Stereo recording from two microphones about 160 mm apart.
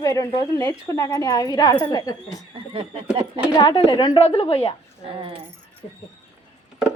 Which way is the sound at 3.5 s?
30° left (ahead or behind).